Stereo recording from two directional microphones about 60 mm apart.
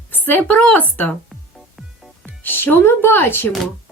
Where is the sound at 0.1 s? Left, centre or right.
Left.